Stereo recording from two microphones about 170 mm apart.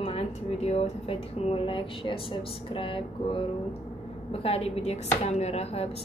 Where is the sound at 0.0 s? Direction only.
40° left (ahead or behind).